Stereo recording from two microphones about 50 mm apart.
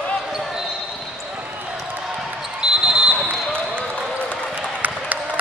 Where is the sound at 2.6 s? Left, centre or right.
Centre.